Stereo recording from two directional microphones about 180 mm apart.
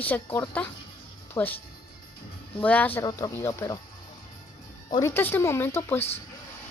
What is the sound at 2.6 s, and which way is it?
Speech, 10° left (ahead or behind).